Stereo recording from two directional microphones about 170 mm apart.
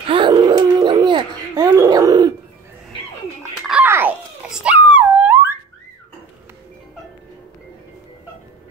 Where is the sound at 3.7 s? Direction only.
10° right (ahead or behind).